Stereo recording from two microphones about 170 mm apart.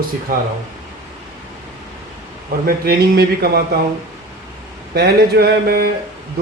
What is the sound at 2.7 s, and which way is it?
A man's voice, 65° right (ahead or behind).